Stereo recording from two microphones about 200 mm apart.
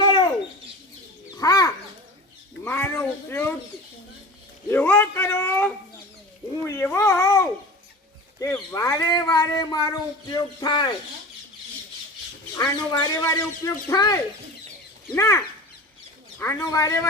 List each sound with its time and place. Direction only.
0.0 s bird: 25° left (ahead or behind)
1.4 s a sound: 15° left (ahead or behind)
4.7 s speech: 10° left (ahead or behind)
12.9 s speech: 20° left (ahead or behind)